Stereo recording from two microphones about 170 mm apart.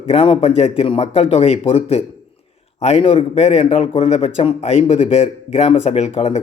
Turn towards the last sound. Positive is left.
turn(degrees=40)  # may be behind; listen again after turning